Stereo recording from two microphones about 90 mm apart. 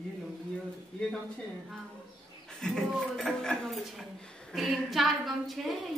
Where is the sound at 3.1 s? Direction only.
5° left (ahead or behind).